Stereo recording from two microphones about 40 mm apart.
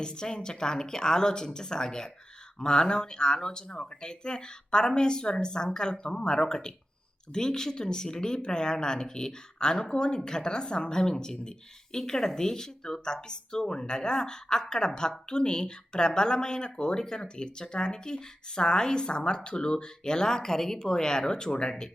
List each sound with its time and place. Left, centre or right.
0.0 s speech: centre